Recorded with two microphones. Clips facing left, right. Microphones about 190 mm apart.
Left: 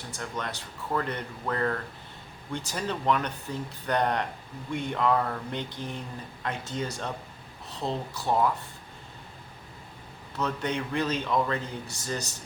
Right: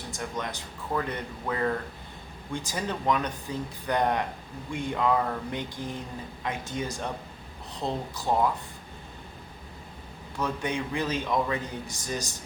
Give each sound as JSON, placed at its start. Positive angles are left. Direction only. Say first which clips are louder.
{"t": 0.1, "sound": "a man's voice", "louder": "right 1 dB", "side_deg": -15}
{"t": 10.3, "sound": "a man's voice", "louder": "even", "side_deg": -10}